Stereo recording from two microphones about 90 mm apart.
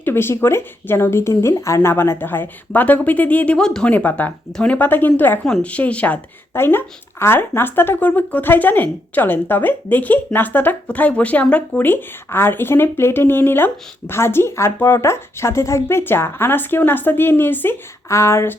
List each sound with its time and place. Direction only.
0.0 s speech: 25° left (ahead or behind)